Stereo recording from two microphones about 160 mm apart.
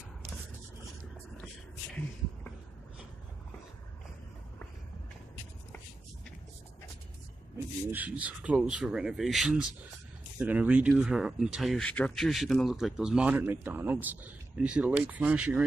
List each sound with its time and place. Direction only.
7.5 s speech: 10° right (ahead or behind)